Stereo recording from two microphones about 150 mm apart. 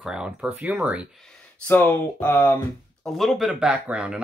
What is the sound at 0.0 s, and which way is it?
Speech, 5° right (ahead or behind).